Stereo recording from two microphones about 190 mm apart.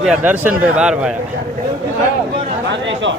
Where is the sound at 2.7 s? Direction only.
70° right (ahead or behind).